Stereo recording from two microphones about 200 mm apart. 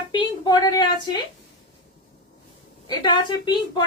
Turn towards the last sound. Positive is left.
turn(degrees=25)  # may be behind; listen again after turning